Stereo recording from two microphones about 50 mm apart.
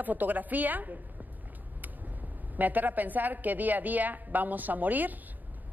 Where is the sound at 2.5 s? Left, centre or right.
Right.